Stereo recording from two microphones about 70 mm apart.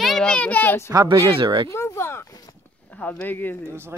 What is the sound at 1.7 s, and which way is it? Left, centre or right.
Speech, left.